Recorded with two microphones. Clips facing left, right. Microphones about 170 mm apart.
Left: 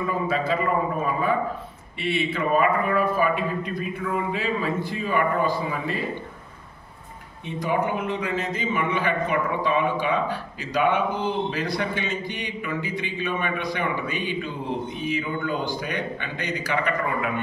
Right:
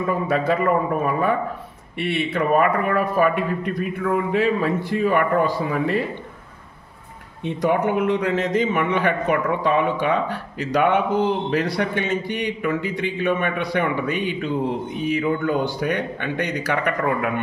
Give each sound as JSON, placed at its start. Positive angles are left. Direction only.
{"t": 0.3, "sound": "a man's voice", "side_deg": -65}
{"t": 7.4, "sound": "a man's voice", "side_deg": -70}